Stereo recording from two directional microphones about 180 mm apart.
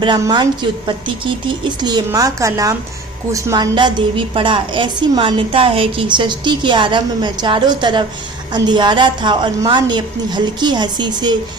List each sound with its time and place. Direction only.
0.0 s a woman's voice: 25° right (ahead or behind)